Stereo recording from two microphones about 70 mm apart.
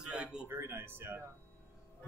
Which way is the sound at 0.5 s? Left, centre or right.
Right.